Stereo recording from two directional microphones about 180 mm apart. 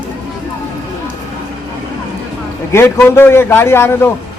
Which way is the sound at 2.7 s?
15° left (ahead or behind).